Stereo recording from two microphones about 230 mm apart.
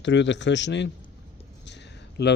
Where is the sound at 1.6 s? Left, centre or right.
Left.